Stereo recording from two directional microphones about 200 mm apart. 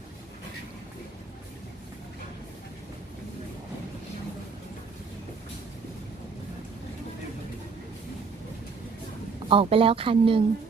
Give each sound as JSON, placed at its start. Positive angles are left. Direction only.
{"t": 9.5, "sound": "speech", "side_deg": -30}